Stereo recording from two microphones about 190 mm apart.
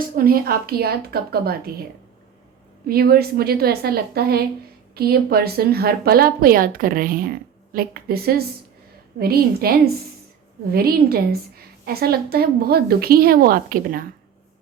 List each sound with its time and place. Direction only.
0.2 s a woman's voice: 50° right (ahead or behind)
2.8 s a woman's voice: 55° right (ahead or behind)